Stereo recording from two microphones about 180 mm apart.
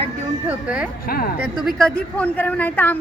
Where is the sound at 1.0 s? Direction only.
55° left (ahead or behind).